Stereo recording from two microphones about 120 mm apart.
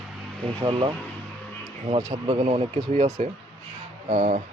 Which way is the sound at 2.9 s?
80° right.